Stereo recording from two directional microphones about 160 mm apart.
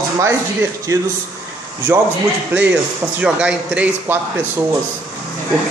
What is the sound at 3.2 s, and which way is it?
A man's voice, 5° right (ahead or behind).